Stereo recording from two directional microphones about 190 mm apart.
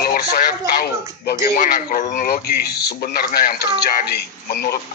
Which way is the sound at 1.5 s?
40° left (ahead or behind).